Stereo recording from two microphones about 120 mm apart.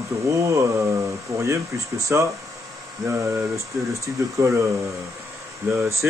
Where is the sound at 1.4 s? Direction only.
25° right (ahead or behind).